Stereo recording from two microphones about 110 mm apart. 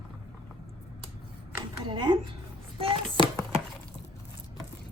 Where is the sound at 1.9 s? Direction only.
50° right (ahead or behind).